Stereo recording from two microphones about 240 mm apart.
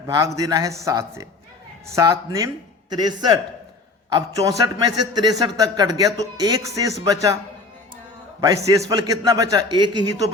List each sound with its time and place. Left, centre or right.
0.3 s a man's voice: centre
8.4 s a man's voice: centre